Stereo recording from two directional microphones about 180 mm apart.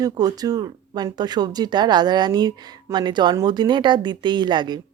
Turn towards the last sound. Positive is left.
turn(degrees=-25)  # may be behind; listen again after turning